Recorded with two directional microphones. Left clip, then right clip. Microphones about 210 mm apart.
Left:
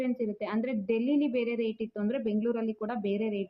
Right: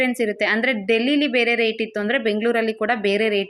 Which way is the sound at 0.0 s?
15° right (ahead or behind).